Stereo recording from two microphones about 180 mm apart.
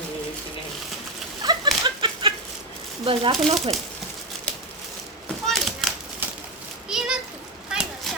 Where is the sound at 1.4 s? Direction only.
20° right (ahead or behind).